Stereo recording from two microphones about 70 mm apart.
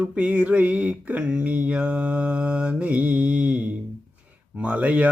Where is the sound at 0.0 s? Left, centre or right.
Centre.